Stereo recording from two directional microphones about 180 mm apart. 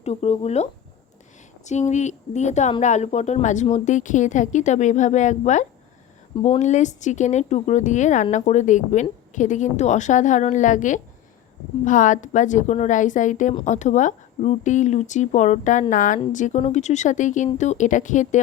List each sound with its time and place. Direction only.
0.0 s speech: 35° left (ahead or behind)